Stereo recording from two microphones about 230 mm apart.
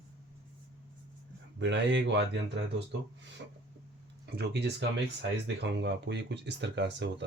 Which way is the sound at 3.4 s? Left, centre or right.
Right.